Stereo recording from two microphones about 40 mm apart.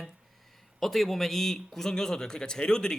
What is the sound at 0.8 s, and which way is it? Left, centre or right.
A man's voice, centre.